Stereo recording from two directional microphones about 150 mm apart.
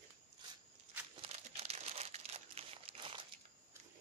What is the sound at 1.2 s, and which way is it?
Crumpling, 40° right (ahead or behind).